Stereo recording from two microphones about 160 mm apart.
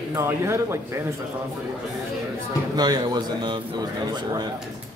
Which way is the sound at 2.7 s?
25° right (ahead or behind).